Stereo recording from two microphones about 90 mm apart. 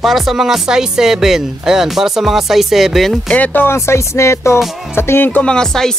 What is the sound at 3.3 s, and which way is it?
Speech, 20° left (ahead or behind).